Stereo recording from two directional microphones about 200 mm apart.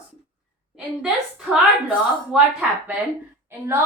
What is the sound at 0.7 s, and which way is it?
A woman's voice, 5° right (ahead or behind).